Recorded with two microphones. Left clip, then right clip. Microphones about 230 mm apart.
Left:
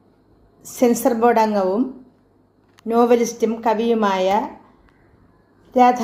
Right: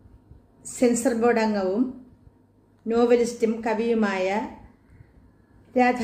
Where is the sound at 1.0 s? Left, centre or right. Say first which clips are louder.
Left 6 dB; left.